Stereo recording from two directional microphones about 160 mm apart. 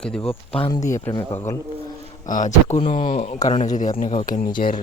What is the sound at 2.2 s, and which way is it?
Speech, 55° left (ahead or behind).